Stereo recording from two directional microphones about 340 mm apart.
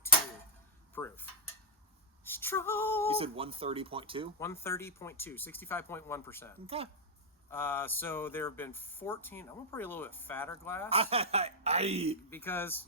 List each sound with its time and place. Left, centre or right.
0.9 s speech: centre
2.2 s female singing: centre
3.1 s speech: centre
4.4 s speech: centre
10.8 s speech: centre
12.3 s speech: centre